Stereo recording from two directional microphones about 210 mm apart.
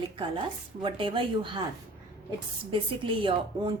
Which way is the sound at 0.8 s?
25° right (ahead or behind).